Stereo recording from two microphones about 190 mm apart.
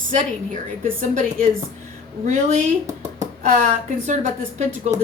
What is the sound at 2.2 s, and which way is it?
Speech, 40° right (ahead or behind).